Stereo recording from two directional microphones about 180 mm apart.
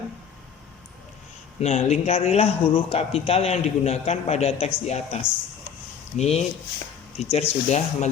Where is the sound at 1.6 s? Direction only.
35° left (ahead or behind).